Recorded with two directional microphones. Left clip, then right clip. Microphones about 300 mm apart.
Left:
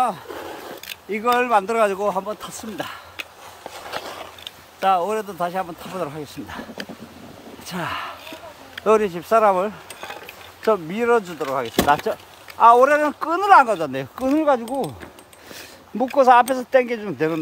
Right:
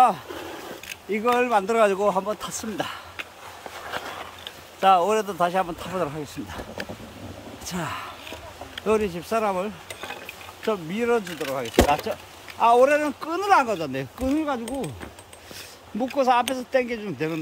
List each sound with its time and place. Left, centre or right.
0.3 s a sound: centre
1.1 s speech: centre
3.7 s a sound: left
4.7 s speech: centre
7.6 s speech: centre
16.0 s speech: centre